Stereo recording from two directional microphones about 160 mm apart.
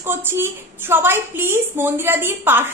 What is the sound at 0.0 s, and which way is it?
A woman's voice, 15° right (ahead or behind).